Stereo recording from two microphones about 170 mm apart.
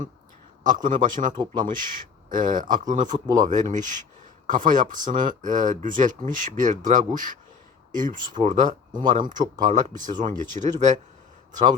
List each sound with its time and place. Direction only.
0.6 s speech: 50° right (ahead or behind)
3.2 s speech: 25° right (ahead or behind)
3.5 s speech: 45° right (ahead or behind)